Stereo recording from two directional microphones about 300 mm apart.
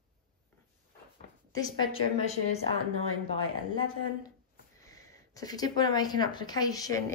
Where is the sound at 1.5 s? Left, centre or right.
Centre.